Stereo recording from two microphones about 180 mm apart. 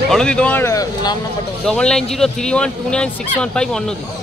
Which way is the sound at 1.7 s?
5° left (ahead or behind).